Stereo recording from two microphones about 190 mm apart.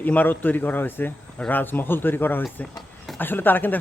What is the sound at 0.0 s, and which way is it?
Speech, 10° left (ahead or behind).